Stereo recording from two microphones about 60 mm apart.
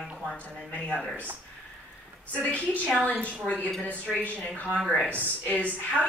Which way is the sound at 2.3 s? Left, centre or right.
Left.